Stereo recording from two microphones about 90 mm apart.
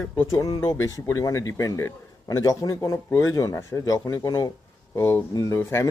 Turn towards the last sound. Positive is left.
turn(degrees=30)  # may be behind; listen again after turning